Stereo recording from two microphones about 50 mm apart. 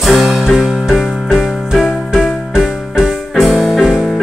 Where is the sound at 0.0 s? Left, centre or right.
Centre.